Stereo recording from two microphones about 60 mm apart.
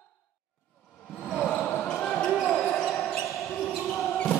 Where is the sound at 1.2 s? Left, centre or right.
Centre.